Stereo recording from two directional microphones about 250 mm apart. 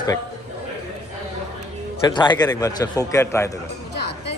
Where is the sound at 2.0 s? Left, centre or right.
Centre.